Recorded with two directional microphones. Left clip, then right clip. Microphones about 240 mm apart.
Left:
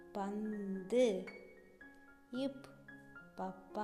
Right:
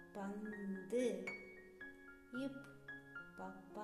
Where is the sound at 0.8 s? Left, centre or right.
Left.